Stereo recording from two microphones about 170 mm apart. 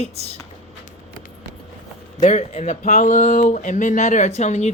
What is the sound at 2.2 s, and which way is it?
Speech, 40° left (ahead or behind).